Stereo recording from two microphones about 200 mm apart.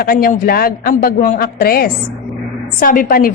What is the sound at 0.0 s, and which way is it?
A woman's voice, 45° left (ahead or behind).